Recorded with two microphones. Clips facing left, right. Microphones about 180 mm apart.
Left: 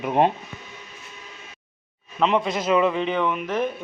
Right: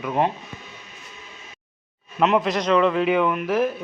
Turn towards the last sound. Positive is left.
turn(degrees=-5)  # may be behind; listen again after turning